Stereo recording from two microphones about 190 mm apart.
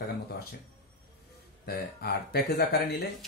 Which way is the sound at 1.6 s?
55° left (ahead or behind).